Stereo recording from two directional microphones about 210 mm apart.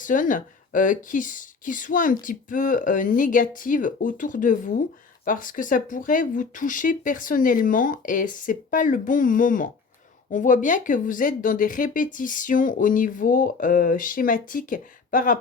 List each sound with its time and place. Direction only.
0.0 s speech: 40° left (ahead or behind)